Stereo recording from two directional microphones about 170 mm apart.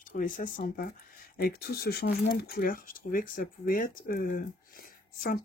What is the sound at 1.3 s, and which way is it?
Speech, 65° left (ahead or behind).